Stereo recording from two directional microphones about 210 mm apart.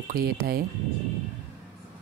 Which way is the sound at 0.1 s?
45° right (ahead or behind).